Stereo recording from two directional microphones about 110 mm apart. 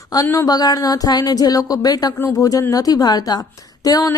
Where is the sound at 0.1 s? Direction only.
30° left (ahead or behind).